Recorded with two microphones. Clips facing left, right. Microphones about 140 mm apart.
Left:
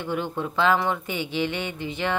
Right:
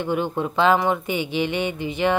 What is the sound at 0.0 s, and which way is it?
Speech, 20° right (ahead or behind).